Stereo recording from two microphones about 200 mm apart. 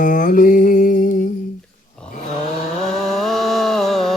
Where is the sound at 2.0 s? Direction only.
5° left (ahead or behind).